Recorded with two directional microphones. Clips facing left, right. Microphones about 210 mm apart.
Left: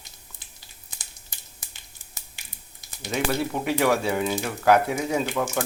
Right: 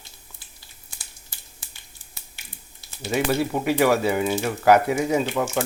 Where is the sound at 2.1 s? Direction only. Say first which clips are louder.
Right 2 dB; 15° left (ahead or behind).